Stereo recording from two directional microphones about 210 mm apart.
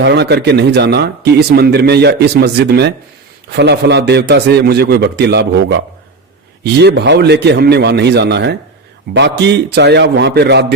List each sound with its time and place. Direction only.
0.0 s a man's voice: 55° right (ahead or behind)